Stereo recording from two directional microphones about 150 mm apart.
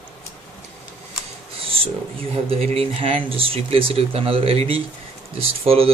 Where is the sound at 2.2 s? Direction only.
40° right (ahead or behind).